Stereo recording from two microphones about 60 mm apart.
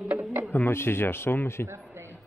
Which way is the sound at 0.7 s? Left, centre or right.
Left.